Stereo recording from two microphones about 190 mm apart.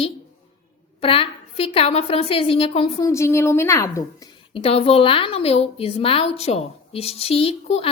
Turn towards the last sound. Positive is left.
turn(degrees=30)  # may be behind; listen again after turning